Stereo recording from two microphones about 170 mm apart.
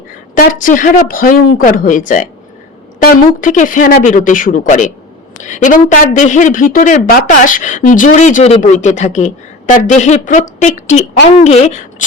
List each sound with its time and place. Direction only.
0.3 s a woman's voice: 50° left (ahead or behind)